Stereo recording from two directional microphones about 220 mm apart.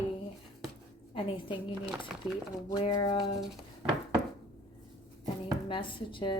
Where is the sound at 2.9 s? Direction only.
20° left (ahead or behind).